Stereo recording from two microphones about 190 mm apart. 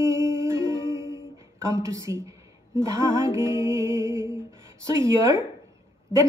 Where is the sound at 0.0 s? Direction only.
15° right (ahead or behind).